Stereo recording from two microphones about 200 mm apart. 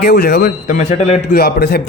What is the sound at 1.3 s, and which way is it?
Speech, 50° left (ahead or behind).